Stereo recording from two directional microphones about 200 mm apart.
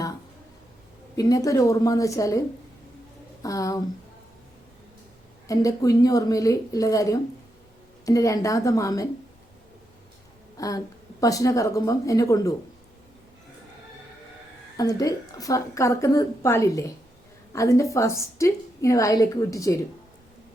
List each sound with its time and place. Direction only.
1.1 s a woman's voice: 15° left (ahead or behind)
3.4 s a woman's voice: 15° left (ahead or behind)
5.5 s a woman's voice: 15° left (ahead or behind)
10.6 s a woman's voice: 15° left (ahead or behind)
14.8 s a woman's voice: 15° left (ahead or behind)